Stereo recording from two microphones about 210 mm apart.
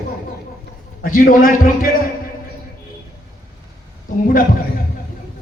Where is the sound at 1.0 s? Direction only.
40° left (ahead or behind).